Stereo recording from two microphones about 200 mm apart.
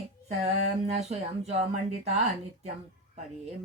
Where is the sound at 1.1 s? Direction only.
35° right (ahead or behind).